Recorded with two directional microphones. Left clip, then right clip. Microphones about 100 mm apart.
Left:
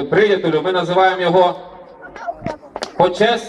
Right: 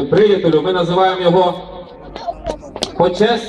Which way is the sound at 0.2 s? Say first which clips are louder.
Right 2 dB; 25° left (ahead or behind).